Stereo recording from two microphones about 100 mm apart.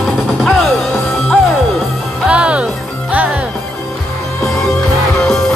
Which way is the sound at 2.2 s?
10° right (ahead or behind).